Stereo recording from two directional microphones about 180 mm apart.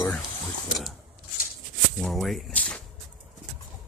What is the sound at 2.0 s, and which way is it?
Speech, centre (ahead or behind).